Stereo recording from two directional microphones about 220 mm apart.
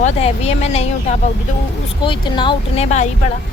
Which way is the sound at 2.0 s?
20° left (ahead or behind).